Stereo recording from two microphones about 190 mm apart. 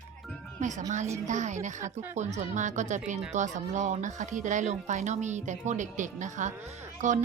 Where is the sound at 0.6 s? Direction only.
40° right (ahead or behind).